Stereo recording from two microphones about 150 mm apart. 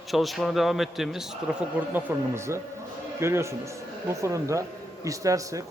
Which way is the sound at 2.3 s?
20° right (ahead or behind).